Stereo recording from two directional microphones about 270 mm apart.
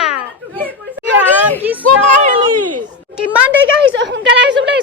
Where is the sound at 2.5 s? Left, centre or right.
Right.